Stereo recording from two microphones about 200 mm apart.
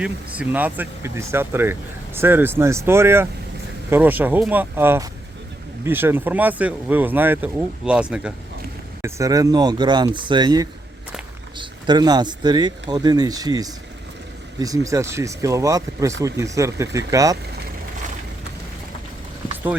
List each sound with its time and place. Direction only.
0.0 s speech: 10° right (ahead or behind)